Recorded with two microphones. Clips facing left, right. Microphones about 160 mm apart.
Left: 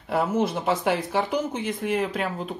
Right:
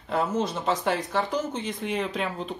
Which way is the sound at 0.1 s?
10° left (ahead or behind).